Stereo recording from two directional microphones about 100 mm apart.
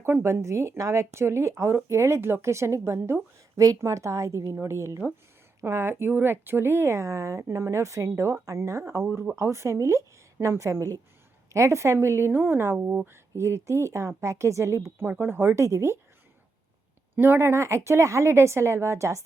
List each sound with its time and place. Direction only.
0.0 s speech: 25° right (ahead or behind)
17.2 s speech: 25° right (ahead or behind)